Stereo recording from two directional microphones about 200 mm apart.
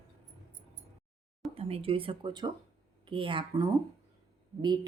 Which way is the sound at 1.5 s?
30° right (ahead or behind).